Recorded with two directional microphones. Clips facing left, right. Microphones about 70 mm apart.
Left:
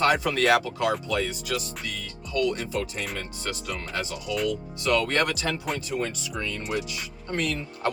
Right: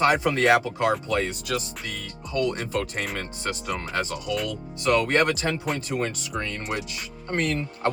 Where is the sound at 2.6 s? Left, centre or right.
Right.